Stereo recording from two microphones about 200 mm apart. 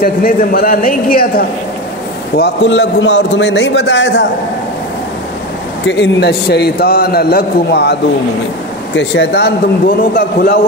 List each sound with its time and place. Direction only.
0.0 s speech: 45° left (ahead or behind)
2.3 s a man's voice: 60° left (ahead or behind)
5.9 s a man's voice: 60° left (ahead or behind)